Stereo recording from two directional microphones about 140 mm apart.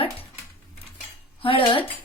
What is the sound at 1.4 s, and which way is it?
Speech, 40° left (ahead or behind).